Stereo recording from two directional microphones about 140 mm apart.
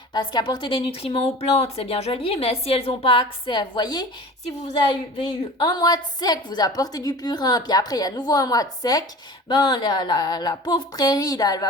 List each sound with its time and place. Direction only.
0.1 s speech: 30° left (ahead or behind)
5.1 s a woman's voice: 35° left (ahead or behind)